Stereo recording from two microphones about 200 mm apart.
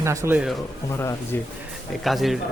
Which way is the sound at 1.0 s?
10° left (ahead or behind).